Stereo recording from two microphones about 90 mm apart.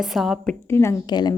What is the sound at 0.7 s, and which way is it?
Speech, 30° left (ahead or behind).